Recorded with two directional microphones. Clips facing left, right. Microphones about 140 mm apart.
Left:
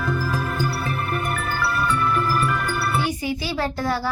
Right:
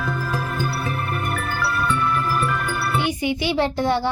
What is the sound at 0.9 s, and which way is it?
Music, centre (ahead or behind).